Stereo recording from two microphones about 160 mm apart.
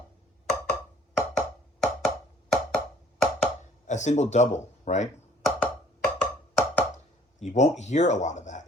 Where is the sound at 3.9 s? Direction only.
45° left (ahead or behind).